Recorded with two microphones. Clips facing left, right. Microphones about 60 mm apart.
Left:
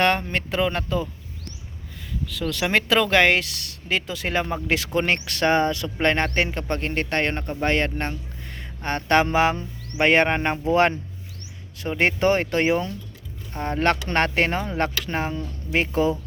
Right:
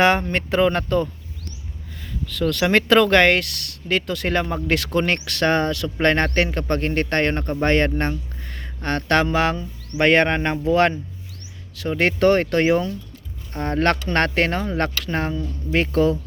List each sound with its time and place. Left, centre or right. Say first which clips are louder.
0.0 s a sound: right 4 dB; centre
0.3 s speech: right 5 dB; centre
2.2 s speech: right 5 dB; centre; by 5.9 s left
6.0 s speech: right 3 dB; centre
8.8 s speech: even; centre